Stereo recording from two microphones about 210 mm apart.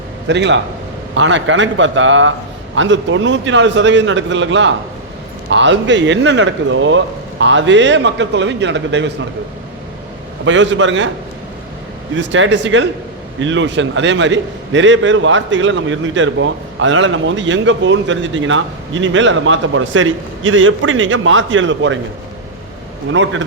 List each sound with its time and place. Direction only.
0.3 s a man's voice: 55° right (ahead or behind)
10.4 s a man's voice: 60° right (ahead or behind)
12.1 s a man's voice: 60° right (ahead or behind)
23.1 s a man's voice: 65° right (ahead or behind)